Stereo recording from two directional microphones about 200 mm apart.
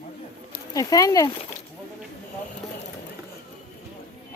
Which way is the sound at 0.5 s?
15° left (ahead or behind).